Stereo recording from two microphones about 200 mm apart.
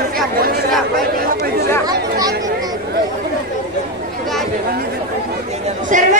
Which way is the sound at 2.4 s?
20° right (ahead or behind).